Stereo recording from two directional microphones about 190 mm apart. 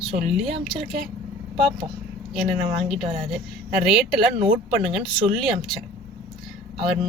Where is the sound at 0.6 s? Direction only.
Centre (ahead or behind).